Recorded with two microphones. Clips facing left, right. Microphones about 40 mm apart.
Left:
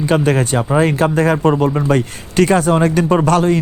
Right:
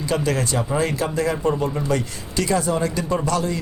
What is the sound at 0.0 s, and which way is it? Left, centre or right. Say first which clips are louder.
Speech: left 7 dB; left.